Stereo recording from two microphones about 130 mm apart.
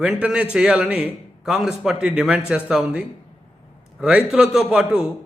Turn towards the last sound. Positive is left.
turn(degrees=-5)  # may be behind; listen again after turning